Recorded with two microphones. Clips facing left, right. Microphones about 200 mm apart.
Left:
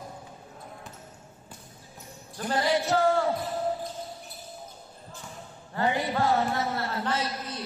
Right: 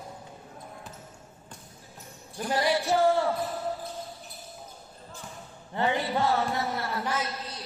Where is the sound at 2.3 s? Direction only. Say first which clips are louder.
Right 1 dB; 15° right (ahead or behind).